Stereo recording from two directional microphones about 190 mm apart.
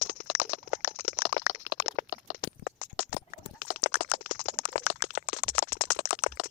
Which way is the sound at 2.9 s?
55° left (ahead or behind).